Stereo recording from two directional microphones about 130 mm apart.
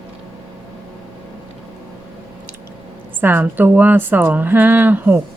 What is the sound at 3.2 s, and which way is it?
Speech, 15° right (ahead or behind).